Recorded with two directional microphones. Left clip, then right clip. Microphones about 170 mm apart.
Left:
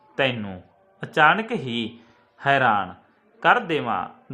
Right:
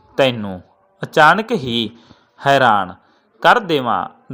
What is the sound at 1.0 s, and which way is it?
Speech, 35° right (ahead or behind).